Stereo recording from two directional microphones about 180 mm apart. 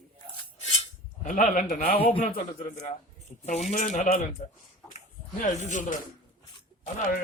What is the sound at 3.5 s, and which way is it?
Speech, 40° left (ahead or behind).